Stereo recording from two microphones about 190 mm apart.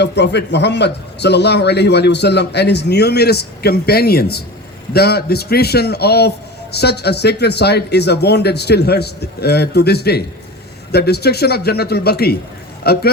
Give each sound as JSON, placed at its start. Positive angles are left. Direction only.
{"t": 0.0, "sound": "a man's voice", "side_deg": 65}